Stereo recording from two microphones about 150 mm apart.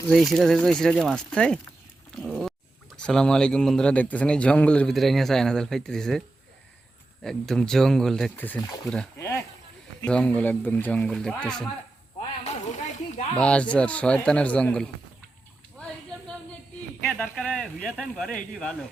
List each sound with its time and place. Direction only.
0.1 s a man's voice: centre (ahead or behind)
8.6 s speech: 25° left (ahead or behind)
10.1 s speech: 5° left (ahead or behind)
12.4 s a sound: 50° left (ahead or behind)
13.3 s speech: 5° left (ahead or behind)
15.8 s a sound: 5° left (ahead or behind)
17.1 s a man's voice: 10° left (ahead or behind)